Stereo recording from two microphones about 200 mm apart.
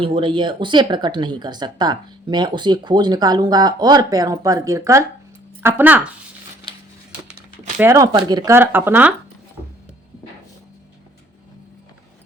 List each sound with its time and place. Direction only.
0.0 s speech: 25° right (ahead or behind); by 6.0 s 10° right (ahead or behind)
7.8 s speech: 15° right (ahead or behind)